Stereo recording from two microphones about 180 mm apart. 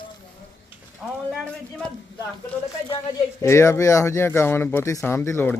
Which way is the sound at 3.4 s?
15° left (ahead or behind).